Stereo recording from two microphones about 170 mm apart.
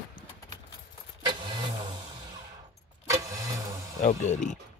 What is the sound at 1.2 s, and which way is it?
Vehicle, 30° right (ahead or behind).